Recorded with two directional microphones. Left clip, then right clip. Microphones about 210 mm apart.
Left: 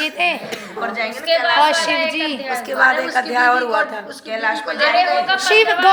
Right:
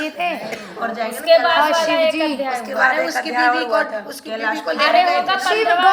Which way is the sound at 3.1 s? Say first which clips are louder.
Left 2 dB; 40° left (ahead or behind).